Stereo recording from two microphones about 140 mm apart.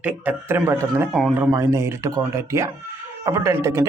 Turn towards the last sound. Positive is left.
turn(degrees=-20)  # may be behind; listen again after turning